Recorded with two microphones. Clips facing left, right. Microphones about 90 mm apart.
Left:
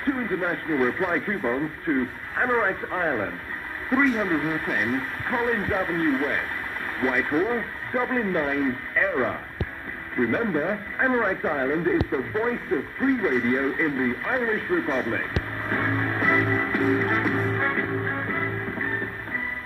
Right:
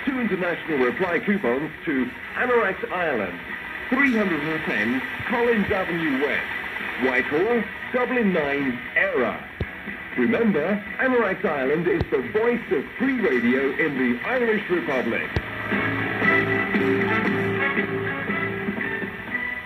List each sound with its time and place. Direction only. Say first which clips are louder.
0.0 s speech: right 1 dB; 10° left (ahead or behind)
10.3 s speech: right 6 dB; 10° left (ahead or behind)
11.7 s speech: right 2 dB; 5° left (ahead or behind); by 15.2 s 20° left (ahead or behind)
15.7 s music: even; 15° left (ahead or behind)